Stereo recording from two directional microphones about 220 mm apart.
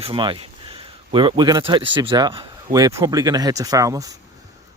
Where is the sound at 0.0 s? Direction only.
25° right (ahead or behind).